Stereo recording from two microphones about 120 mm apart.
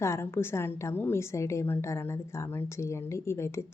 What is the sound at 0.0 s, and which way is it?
A woman's voice, 20° left (ahead or behind).